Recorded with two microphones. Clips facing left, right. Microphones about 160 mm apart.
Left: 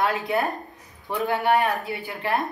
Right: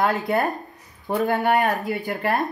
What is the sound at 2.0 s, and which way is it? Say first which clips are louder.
Speech: right 2 dB; 40° right (ahead or behind).